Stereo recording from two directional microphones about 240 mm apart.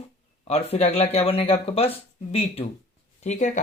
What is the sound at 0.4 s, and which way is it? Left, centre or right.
Speech, left.